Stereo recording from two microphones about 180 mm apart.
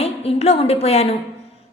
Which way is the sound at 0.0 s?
35° left (ahead or behind).